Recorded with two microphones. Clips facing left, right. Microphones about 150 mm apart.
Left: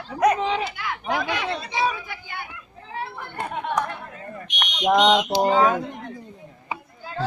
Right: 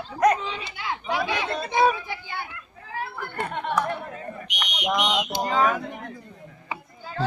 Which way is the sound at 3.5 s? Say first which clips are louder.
Left 2 dB; centre (ahead or behind).